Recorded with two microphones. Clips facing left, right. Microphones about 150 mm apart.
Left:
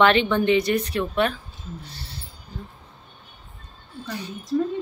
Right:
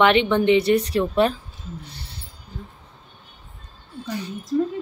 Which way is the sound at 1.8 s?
20° right (ahead or behind).